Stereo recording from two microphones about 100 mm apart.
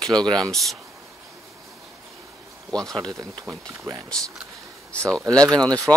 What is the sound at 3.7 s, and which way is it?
Speech, 30° right (ahead or behind).